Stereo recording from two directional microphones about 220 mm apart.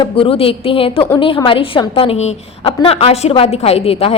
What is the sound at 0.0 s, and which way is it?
A woman's voice, 25° left (ahead or behind).